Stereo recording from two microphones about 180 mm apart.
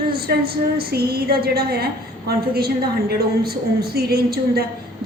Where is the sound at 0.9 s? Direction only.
60° right (ahead or behind).